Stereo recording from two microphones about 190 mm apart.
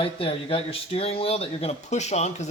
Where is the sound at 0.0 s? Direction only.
30° left (ahead or behind).